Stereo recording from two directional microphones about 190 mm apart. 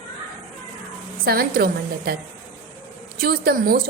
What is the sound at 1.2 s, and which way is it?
Speech, 50° right (ahead or behind).